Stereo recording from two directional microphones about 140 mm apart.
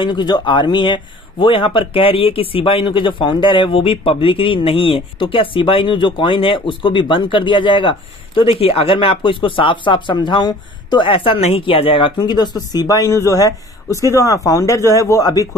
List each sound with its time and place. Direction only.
0.0 s a man's voice: 30° left (ahead or behind)